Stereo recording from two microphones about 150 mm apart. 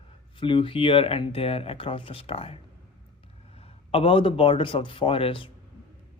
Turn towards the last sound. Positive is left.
turn(degrees=35)  # may be behind; listen again after turning